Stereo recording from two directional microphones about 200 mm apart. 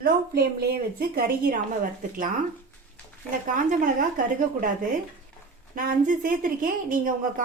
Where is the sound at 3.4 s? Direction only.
40° right (ahead or behind).